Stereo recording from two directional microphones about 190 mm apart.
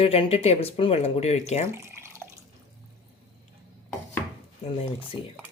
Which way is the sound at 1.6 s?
15° right (ahead or behind).